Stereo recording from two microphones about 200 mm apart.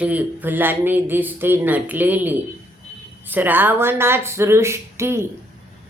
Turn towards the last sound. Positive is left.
turn(degrees=-15)  # may be behind; listen again after turning